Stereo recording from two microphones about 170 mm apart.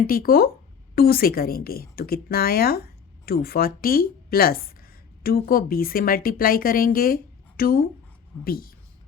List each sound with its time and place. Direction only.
0.1 s a woman's voice: 60° left (ahead or behind)